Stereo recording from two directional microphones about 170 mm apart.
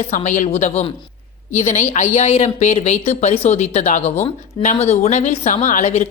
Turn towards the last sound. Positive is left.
turn(degrees=45)  # may be behind; listen again after turning